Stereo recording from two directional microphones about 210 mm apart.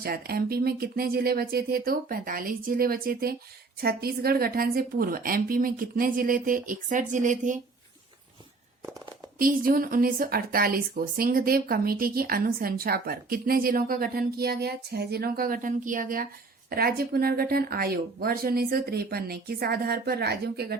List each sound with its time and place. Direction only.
0.0 s a woman's voice: 45° right (ahead or behind)
9.4 s a woman's voice: 40° right (ahead or behind)